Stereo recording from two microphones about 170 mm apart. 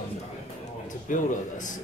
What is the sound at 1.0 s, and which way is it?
Speech, 50° left (ahead or behind).